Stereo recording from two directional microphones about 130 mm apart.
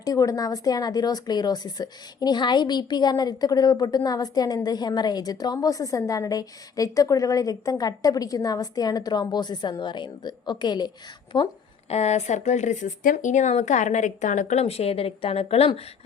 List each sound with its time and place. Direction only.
0.0 s speech: 25° left (ahead or behind)
11.9 s speech: 55° left (ahead or behind)